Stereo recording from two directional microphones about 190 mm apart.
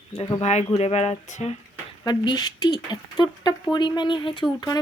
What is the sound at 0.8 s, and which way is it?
Speech, 35° left (ahead or behind).